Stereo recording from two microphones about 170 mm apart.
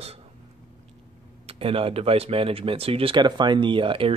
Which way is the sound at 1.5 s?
35° right (ahead or behind).